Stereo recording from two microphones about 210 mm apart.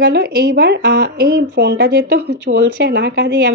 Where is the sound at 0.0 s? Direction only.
50° right (ahead or behind).